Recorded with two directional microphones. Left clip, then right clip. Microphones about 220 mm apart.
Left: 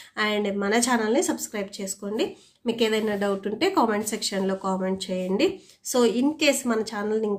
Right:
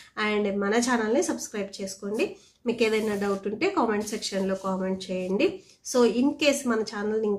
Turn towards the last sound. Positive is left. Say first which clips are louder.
# left 1 dB
turn(degrees=15)  # may be behind; listen again after turning